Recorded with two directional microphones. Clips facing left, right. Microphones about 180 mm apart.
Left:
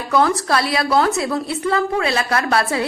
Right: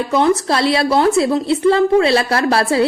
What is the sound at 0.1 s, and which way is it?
A woman's voice, 25° right (ahead or behind).